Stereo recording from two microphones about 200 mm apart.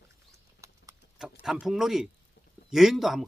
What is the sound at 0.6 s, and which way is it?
Clip-clop, 15° right (ahead or behind).